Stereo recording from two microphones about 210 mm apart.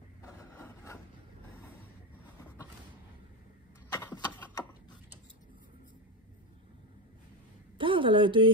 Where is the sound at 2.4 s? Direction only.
10° left (ahead or behind).